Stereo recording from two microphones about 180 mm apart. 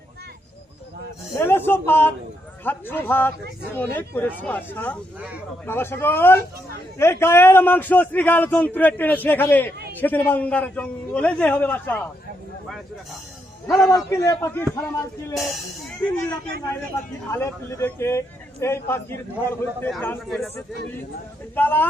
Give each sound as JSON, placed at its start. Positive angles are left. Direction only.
{"t": 1.4, "sound": "a sound", "side_deg": 10}
{"t": 2.6, "sound": "a man's voice", "side_deg": 10}
{"t": 13.7, "sound": "a man's voice", "side_deg": 0}
{"t": 13.9, "sound": "a man's voice", "side_deg": 20}
{"t": 15.4, "sound": "a man's voice", "side_deg": 0}
{"t": 17.3, "sound": "a man's voice", "side_deg": 15}
{"t": 21.5, "sound": "a man's voice", "side_deg": 10}